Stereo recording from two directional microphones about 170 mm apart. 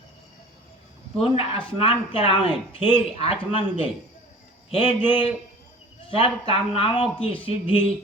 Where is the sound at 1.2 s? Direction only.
35° left (ahead or behind).